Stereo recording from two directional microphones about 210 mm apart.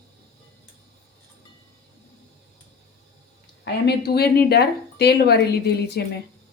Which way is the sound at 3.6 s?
50° left (ahead or behind).